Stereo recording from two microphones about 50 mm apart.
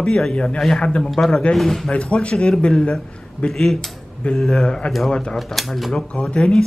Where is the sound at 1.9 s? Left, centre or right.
Left.